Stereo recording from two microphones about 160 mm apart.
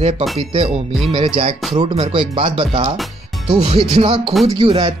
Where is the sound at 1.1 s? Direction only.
35° right (ahead or behind).